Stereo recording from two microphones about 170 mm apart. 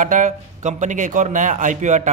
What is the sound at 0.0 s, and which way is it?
A man's voice, 50° right (ahead or behind).